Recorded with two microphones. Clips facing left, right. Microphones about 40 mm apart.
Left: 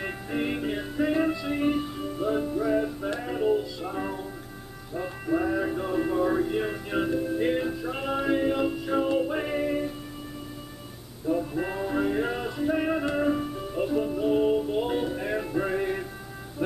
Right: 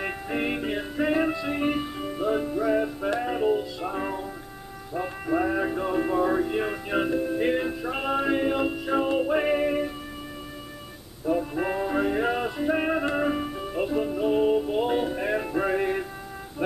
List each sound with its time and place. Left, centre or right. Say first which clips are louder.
0.0 s music: right 2 dB; centre
4.9 s speech: right 1 dB; centre
11.2 s music: right 2 dB; centre